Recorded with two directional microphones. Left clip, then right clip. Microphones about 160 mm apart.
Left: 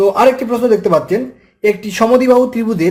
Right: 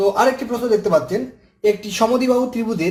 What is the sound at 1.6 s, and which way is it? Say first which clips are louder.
Speech: left 4 dB; 40° left (ahead or behind).